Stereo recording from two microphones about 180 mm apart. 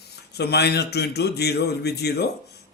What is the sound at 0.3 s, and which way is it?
Speech, 65° left (ahead or behind).